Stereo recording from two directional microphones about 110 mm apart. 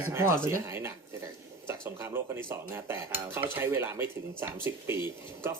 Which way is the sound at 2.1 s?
20° right (ahead or behind).